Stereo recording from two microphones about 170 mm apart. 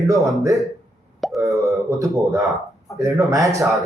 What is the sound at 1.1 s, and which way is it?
Plop, centre (ahead or behind).